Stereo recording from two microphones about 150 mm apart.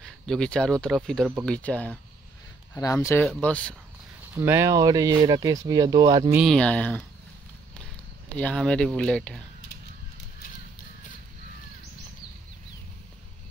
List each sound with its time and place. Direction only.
0.3 s speech: 5° left (ahead or behind)
2.7 s speech: 20° left (ahead or behind)
3.3 s speech: 10° left (ahead or behind)
4.4 s speech: 15° right (ahead or behind)
6.3 s speech: centre (ahead or behind)
8.4 s speech: 5° left (ahead or behind)